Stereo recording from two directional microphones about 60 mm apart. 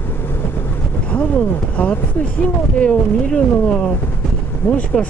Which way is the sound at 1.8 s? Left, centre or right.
Left.